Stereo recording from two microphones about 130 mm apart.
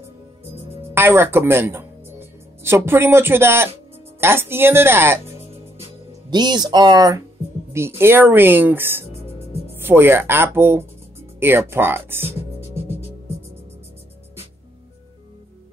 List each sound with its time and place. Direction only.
0.9 s speech: 15° right (ahead or behind)
6.3 s speech: 35° right (ahead or behind)
8.0 s speech: 15° right (ahead or behind)
12.5 s music: 55° left (ahead or behind)